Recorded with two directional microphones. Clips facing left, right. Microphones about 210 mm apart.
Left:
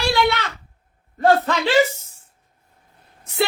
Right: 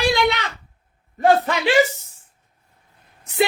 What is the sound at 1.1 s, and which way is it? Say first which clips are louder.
Speech: even; 15° right (ahead or behind).